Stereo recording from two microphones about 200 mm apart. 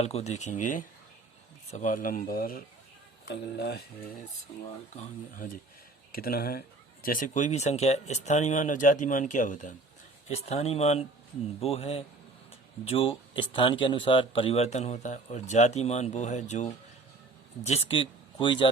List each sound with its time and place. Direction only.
0.0 s speech: 30° left (ahead or behind); by 3.8 s 55° left (ahead or behind)
4.9 s speech: 45° left (ahead or behind); by 18.7 s 25° left (ahead or behind)